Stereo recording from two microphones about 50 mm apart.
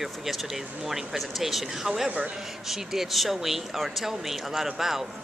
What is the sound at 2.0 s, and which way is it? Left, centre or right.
Speech, right.